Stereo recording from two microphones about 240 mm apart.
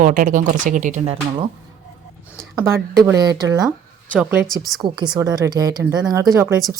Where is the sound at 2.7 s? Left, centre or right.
Centre.